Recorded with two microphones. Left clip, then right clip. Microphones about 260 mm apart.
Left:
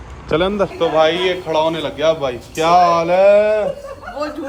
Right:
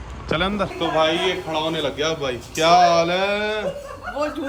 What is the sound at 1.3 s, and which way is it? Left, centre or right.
Speech, centre.